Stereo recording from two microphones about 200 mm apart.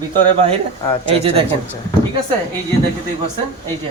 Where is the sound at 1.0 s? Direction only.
30° right (ahead or behind).